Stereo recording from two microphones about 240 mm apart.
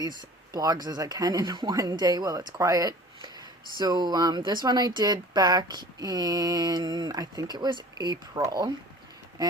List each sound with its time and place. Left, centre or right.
0.2 s speech: centre
9.4 s quack: centre